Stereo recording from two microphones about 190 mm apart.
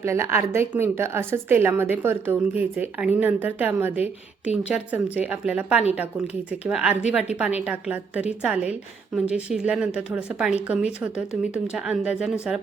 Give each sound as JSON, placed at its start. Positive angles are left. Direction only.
{"t": 0.0, "sound": "a woman's voice", "side_deg": -15}